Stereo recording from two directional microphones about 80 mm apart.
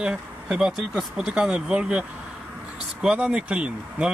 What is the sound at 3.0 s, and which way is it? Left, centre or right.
Speech, centre.